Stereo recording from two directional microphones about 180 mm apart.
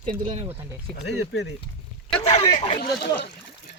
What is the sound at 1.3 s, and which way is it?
Speech, 85° left.